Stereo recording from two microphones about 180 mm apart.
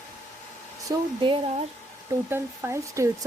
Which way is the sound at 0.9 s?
25° right (ahead or behind).